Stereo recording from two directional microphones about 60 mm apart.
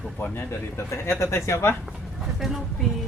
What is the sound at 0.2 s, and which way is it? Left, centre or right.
Speech, left.